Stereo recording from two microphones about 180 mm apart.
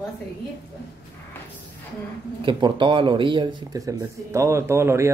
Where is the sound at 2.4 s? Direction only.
25° right (ahead or behind).